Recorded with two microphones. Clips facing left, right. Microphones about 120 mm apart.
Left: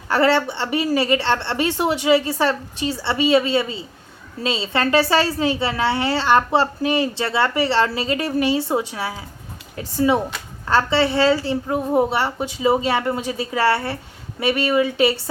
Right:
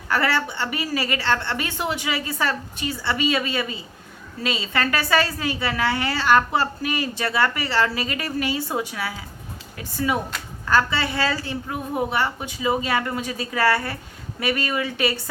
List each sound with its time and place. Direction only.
0.1 s a woman's voice: 25° left (ahead or behind)